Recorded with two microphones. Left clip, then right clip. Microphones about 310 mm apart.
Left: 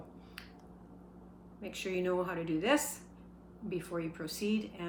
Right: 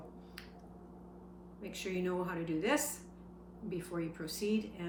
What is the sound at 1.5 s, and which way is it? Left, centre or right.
Speech, centre.